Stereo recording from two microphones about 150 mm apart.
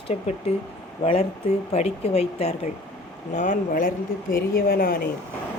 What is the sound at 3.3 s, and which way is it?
A woman's voice, 60° left (ahead or behind).